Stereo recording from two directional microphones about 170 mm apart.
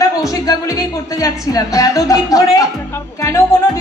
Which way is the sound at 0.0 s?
20° left (ahead or behind).